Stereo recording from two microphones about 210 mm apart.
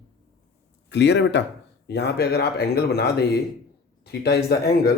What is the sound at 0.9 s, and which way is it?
Speech, 55° left (ahead or behind).